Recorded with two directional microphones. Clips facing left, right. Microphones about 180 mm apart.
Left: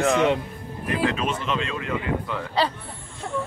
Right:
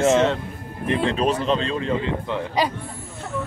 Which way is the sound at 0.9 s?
30° right (ahead or behind).